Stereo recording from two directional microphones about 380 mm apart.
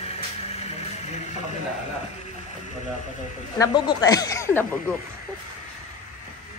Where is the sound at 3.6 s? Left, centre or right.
Centre.